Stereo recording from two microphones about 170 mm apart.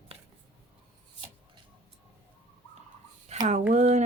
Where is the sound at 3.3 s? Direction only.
40° right (ahead or behind).